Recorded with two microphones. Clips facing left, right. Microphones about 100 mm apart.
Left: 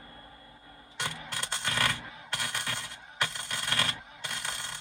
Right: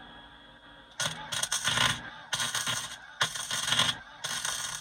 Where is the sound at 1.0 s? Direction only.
25° right (ahead or behind).